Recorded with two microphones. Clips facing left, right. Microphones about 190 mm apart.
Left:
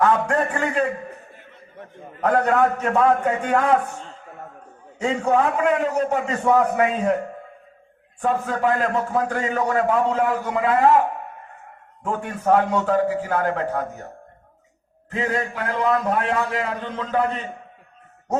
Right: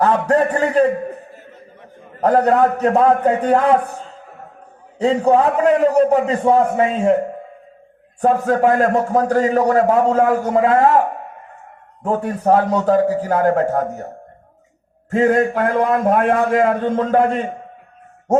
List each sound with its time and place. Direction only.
0.3 s a man's voice: 35° right (ahead or behind)
2.2 s a man's voice: 35° right (ahead or behind)
4.9 s a man's voice: 35° right (ahead or behind)
8.2 s a man's voice: 40° right (ahead or behind)
12.0 s a man's voice: 35° right (ahead or behind)
15.1 s a man's voice: 50° right (ahead or behind)